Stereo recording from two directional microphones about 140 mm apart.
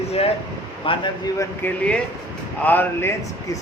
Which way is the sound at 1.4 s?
10° left (ahead or behind).